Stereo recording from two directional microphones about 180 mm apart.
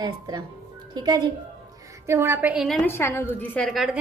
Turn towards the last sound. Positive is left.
turn(degrees=0)  # may be behind; listen again after turning